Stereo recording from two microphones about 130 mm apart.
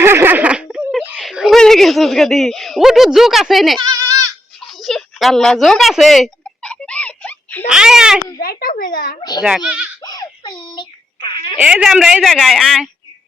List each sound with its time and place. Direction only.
0.0 s a sound: 15° right (ahead or behind)
1.2 s speech: centre (ahead or behind)
3.8 s goat: 25° right (ahead or behind)
4.6 s a sound: centre (ahead or behind)
7.7 s a woman's voice: 5° right (ahead or behind)
8.7 s speech: 90° left
9.4 s speech: 10° right (ahead or behind)
10.0 s a sound: 30° left (ahead or behind)
11.6 s a woman's voice: 5° right (ahead or behind)